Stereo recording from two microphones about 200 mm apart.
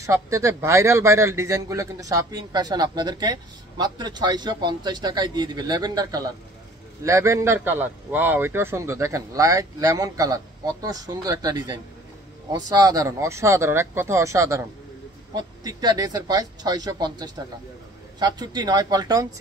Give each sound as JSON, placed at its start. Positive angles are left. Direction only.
{"t": 0.0, "sound": "a man's voice", "side_deg": -15}